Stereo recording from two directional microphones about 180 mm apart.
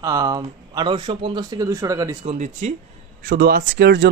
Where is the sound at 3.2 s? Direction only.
55° right (ahead or behind).